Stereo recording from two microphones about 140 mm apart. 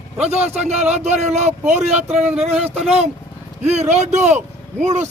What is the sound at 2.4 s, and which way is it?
A man's voice, 45° right (ahead or behind).